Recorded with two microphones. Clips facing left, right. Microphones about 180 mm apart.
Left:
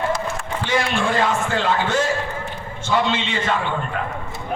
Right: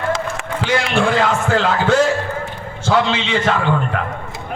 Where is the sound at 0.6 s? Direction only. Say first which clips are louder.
Right 4 dB; 90° right.